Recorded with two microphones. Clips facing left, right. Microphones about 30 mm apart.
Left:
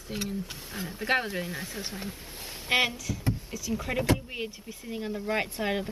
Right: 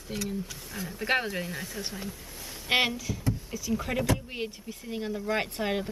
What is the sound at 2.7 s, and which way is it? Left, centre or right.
Speech, centre.